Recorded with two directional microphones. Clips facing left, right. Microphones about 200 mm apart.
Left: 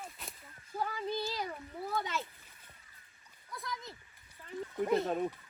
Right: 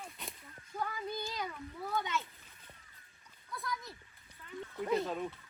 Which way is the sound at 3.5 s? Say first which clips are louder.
Right 1 dB; 20° left (ahead or behind).